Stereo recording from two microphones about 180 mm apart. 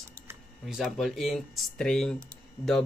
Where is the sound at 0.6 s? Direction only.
Centre (ahead or behind).